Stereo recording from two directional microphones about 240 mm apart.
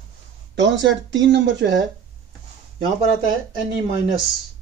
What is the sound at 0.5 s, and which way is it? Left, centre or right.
Speech, right.